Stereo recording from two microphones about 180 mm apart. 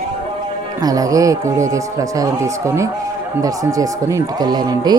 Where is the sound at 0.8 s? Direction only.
20° right (ahead or behind).